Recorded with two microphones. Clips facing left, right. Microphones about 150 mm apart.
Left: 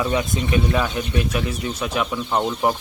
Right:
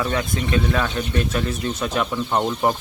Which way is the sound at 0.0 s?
15° left (ahead or behind).